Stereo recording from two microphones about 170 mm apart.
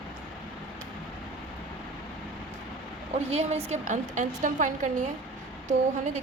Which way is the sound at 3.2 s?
40° right (ahead or behind).